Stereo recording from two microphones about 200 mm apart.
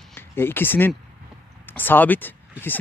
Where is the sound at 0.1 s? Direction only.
10° left (ahead or behind).